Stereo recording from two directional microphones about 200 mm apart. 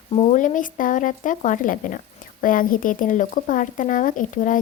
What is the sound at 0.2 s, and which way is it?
A woman's voice, 40° left (ahead or behind).